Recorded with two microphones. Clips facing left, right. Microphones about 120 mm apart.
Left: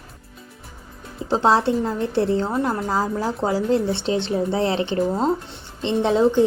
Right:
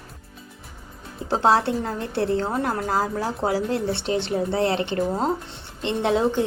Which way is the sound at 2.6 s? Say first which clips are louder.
Left 1 dB; 20° left (ahead or behind).